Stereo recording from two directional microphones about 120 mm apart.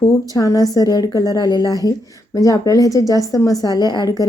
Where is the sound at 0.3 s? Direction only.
30° left (ahead or behind).